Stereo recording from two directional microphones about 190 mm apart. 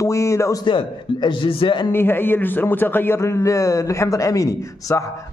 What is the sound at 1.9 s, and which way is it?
A man's voice, 10° left (ahead or behind).